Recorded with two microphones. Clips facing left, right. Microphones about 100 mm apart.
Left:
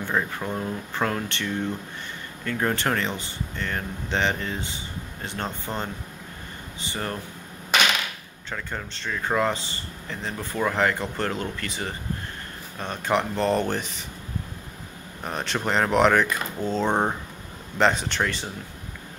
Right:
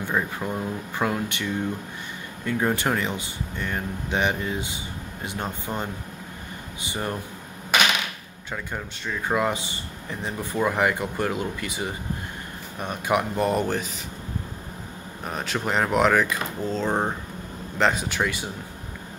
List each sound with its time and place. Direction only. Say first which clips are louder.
0.0 s speech: even; 5° right (ahead or behind)
8.5 s speech: right 1 dB; 10° right (ahead or behind)
15.2 s speech: left 1 dB; 5° right (ahead or behind)